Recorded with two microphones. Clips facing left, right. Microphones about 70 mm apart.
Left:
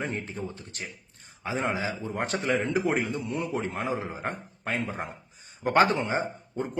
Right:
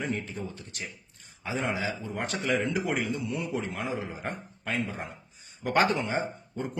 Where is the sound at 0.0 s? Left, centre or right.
Left.